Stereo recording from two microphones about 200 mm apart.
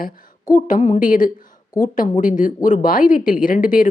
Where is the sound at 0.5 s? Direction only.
40° left (ahead or behind).